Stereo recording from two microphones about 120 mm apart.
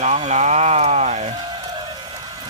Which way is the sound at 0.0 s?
75° right (ahead or behind).